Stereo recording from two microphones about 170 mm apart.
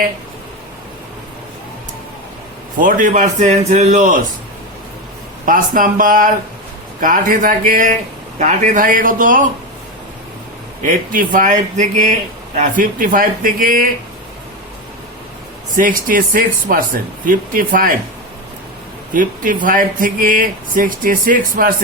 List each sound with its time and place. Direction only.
2.7 s speech: 50° right (ahead or behind)
5.5 s speech: 50° right (ahead or behind)
10.8 s speech: 55° right (ahead or behind)
15.7 s speech: 55° right (ahead or behind)
19.1 s speech: 55° right (ahead or behind)